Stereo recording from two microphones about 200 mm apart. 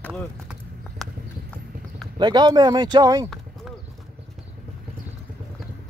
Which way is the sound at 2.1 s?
20° right (ahead or behind).